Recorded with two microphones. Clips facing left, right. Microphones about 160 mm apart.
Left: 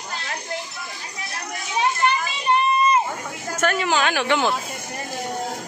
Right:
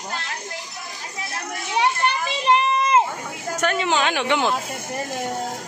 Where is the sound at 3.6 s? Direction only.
20° right (ahead or behind).